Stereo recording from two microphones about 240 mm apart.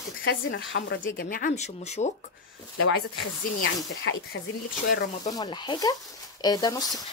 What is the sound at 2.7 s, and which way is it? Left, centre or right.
Speech, left.